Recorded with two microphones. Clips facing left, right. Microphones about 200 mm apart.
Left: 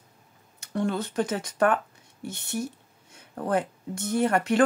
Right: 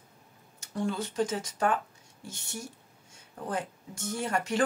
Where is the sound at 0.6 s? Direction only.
65° left (ahead or behind).